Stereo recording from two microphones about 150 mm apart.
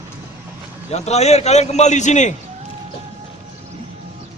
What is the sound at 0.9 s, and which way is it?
A man's voice, 45° left (ahead or behind).